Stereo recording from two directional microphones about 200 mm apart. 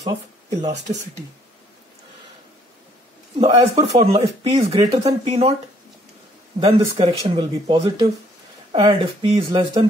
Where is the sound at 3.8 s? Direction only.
30° right (ahead or behind).